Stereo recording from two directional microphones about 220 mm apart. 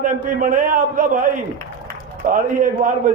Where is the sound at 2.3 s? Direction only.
35° right (ahead or behind).